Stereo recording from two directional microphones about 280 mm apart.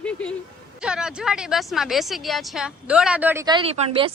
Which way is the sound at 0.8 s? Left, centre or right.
Centre.